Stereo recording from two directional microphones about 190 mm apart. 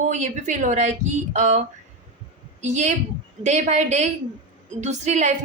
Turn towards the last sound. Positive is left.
turn(degrees=-35)  # may be behind; listen again after turning